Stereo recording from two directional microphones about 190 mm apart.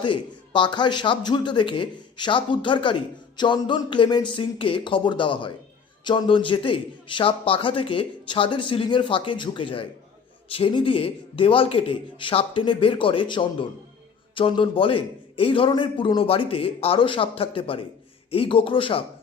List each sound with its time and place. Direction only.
0.0 s a man's voice: 25° left (ahead or behind)